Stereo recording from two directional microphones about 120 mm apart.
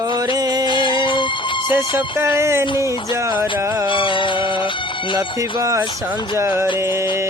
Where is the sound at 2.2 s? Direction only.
20° right (ahead or behind).